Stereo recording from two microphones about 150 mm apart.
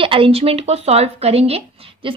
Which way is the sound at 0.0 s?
35° right (ahead or behind).